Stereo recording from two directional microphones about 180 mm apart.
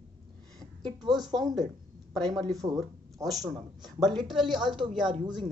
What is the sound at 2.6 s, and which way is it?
Speech, 15° right (ahead or behind).